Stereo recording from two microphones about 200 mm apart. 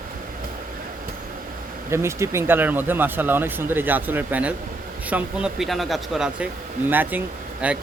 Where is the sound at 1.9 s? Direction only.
15° right (ahead or behind).